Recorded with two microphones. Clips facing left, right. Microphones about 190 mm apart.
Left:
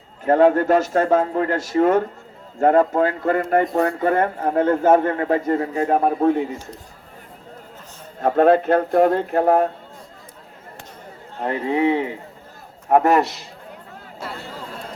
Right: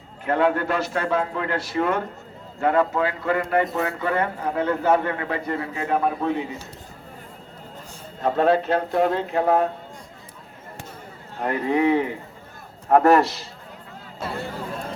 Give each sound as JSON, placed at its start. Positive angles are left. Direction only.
{"t": 0.3, "sound": "speech", "side_deg": 40}
{"t": 8.2, "sound": "speech", "side_deg": 50}
{"t": 11.4, "sound": "speech", "side_deg": 25}